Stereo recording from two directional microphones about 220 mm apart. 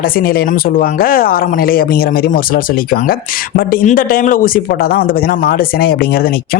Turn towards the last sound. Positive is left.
turn(degrees=40)  # may be behind; listen again after turning